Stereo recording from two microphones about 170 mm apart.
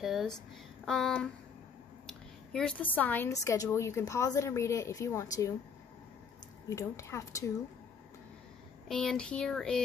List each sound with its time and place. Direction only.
0.0 s a woman's voice: centre (ahead or behind); by 5.5 s 15° left (ahead or behind)
6.7 s a woman's voice: 20° left (ahead or behind)
8.8 s speech: 5° left (ahead or behind)